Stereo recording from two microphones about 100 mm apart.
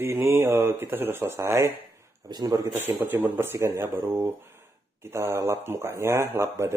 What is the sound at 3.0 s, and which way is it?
Speech, 20° right (ahead or behind).